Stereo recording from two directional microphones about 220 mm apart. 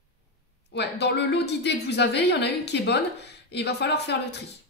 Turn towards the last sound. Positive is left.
turn(degrees=50)  # may be behind; listen again after turning